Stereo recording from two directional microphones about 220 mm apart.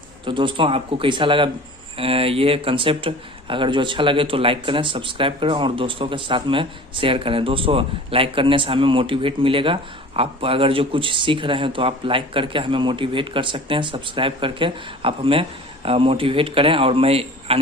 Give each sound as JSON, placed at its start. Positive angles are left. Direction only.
{"t": 0.3, "sound": "speech", "side_deg": -20}